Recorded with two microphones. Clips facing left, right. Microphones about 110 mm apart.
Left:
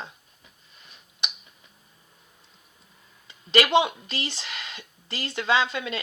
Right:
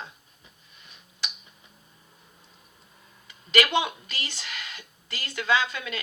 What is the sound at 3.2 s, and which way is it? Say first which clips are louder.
Speech: left 2 dB; 30° left (ahead or behind).